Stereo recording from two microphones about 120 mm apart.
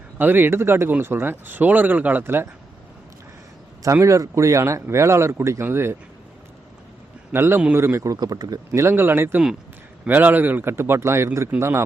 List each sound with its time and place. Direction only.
0.2 s speech: 15° right (ahead or behind)
3.9 s speech: 25° right (ahead or behind)
7.3 s speech: 20° right (ahead or behind)